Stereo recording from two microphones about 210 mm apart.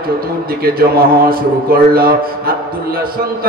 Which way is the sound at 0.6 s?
45° right (ahead or behind).